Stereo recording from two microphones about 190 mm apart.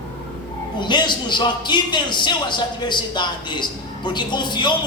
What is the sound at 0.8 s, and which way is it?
A man's voice, 25° left (ahead or behind).